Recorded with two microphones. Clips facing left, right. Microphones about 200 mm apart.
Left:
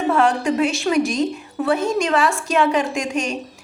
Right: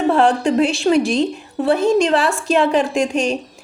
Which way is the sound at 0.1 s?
30° right (ahead or behind).